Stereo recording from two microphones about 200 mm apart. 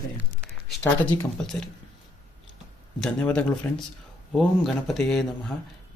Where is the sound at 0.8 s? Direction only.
10° left (ahead or behind).